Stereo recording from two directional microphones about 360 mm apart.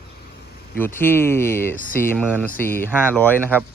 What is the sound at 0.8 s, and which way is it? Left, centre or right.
Speech, centre.